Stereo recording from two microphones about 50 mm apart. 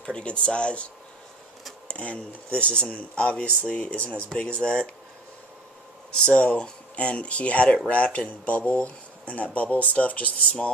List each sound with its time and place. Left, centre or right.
0.0 s speech: left
2.0 s speech: left
6.2 s speech: left